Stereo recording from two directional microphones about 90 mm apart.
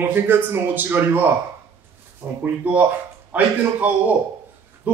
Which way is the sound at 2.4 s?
20° right (ahead or behind).